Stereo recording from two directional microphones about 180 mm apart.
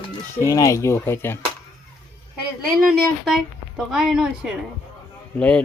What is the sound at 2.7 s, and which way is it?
A woman's voice, centre (ahead or behind).